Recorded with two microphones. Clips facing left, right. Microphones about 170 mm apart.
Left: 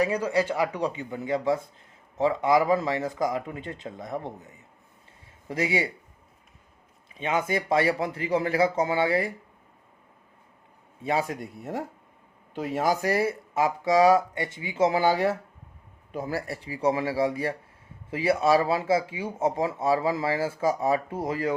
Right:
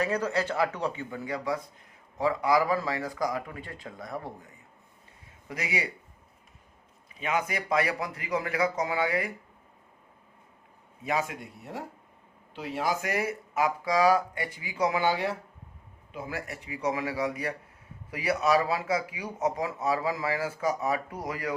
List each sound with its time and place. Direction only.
0.0 s speech: 10° left (ahead or behind); by 5.9 s 30° left (ahead or behind)
7.2 s speech: 25° left (ahead or behind)
11.0 s speech: 30° left (ahead or behind)
12.5 s speech: 45° left (ahead or behind); by 15.0 s 25° left (ahead or behind)
15.0 s speech: 45° left (ahead or behind); by 21.5 s 25° left (ahead or behind)